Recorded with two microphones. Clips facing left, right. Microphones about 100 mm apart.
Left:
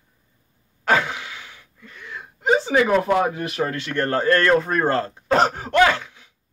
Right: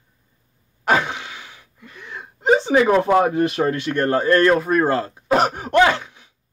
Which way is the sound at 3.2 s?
30° right (ahead or behind).